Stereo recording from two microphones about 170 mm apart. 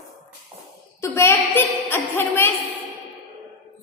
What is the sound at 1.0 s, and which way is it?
A woman's voice, 15° left (ahead or behind).